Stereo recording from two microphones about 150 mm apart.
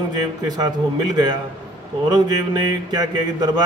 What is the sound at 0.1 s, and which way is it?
Speech, 25° right (ahead or behind).